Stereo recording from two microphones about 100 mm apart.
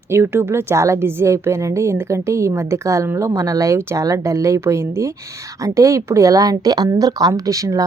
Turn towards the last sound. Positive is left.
turn(degrees=-35)  # may be behind; listen again after turning